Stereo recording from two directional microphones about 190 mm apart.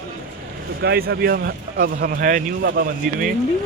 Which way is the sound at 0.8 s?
55° right (ahead or behind).